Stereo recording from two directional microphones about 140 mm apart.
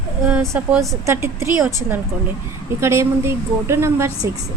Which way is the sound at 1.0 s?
20° right (ahead or behind).